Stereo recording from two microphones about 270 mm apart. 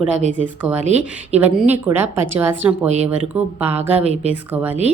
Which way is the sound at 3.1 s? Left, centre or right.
Centre.